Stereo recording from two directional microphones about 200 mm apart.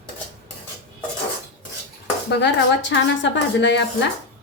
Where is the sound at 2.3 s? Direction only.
60° left (ahead or behind).